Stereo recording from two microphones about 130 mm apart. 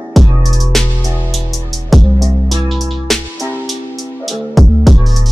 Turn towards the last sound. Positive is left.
turn(degrees=0)  # may be behind; listen again after turning